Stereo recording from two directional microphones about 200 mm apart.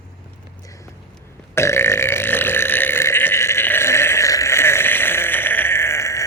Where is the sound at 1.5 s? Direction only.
15° left (ahead or behind).